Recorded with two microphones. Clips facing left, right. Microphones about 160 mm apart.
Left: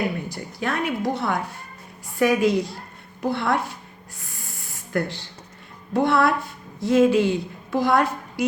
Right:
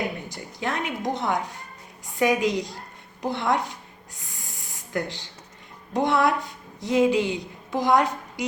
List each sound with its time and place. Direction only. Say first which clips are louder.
0.3 s a woman's voice: left 2 dB; 20° right (ahead or behind)
4.2 s a sound: left 2 dB; 20° right (ahead or behind)
5.9 s speech: left 2 dB; 15° right (ahead or behind)